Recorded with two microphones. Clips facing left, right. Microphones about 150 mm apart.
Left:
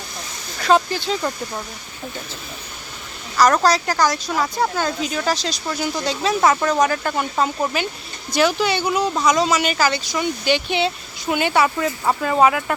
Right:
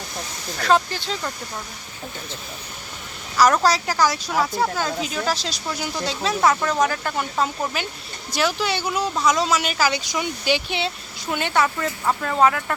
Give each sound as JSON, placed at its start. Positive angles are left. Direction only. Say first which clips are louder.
{"t": 0.6, "sound": "speech", "louder": "left 3 dB", "side_deg": 0}
{"t": 3.3, "sound": "speech", "louder": "left 2 dB", "side_deg": -5}
{"t": 10.0, "sound": "speech", "louder": "left 2 dB", "side_deg": -15}
{"t": 10.4, "sound": "speech", "louder": "left 4 dB", "side_deg": -5}